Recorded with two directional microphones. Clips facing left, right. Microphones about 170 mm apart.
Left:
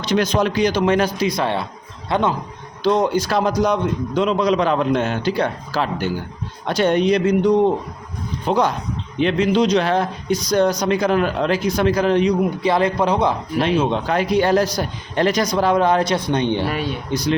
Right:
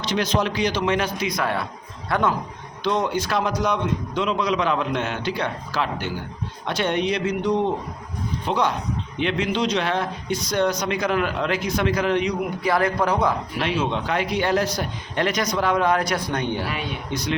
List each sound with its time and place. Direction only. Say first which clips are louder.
0.0 s speech: left 4 dB; 45° left (ahead or behind); by 2.3 s 20° left (ahead or behind)
2.8 s speech: left 5 dB; 35° left (ahead or behind); by 13.3 s 20° left (ahead or behind)
13.6 s speech: left 8 dB; 35° left (ahead or behind)
16.6 s speech: left 5 dB; 40° left (ahead or behind)